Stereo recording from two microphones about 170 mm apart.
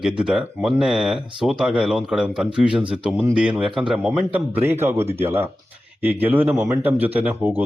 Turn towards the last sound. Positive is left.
turn(degrees=-10)  # may be behind; listen again after turning